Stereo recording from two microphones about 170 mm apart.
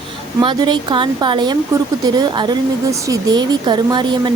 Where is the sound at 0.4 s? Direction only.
25° right (ahead or behind).